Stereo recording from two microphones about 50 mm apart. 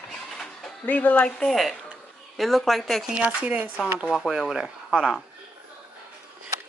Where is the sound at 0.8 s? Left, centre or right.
Left.